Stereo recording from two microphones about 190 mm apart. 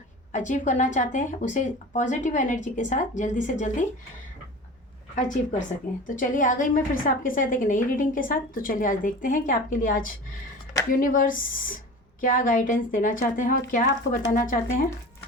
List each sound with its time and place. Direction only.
0.3 s speech: 40° left (ahead or behind)
6.1 s a woman's voice: 45° left (ahead or behind)